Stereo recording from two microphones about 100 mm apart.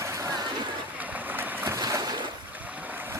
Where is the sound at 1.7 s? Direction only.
35° right (ahead or behind).